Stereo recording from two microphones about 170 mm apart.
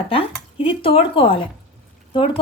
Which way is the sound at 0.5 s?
30° left (ahead or behind).